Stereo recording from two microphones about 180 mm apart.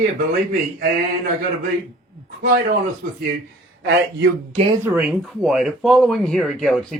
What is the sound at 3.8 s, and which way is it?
Speech, 75° right (ahead or behind).